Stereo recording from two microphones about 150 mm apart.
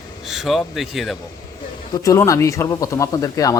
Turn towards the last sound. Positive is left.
turn(degrees=25)  # may be behind; listen again after turning